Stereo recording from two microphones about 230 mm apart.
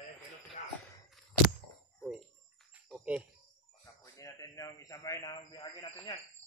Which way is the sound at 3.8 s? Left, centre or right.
Centre.